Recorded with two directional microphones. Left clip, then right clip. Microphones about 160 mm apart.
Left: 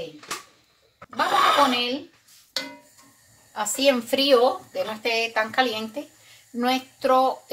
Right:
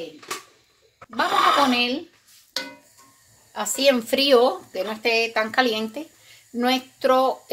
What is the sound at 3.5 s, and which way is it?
Speech, 65° right (ahead or behind).